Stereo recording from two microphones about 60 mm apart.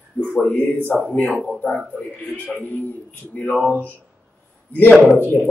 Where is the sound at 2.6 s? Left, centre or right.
Left.